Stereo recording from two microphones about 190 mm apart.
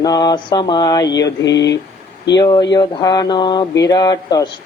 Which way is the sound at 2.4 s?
20° left (ahead or behind).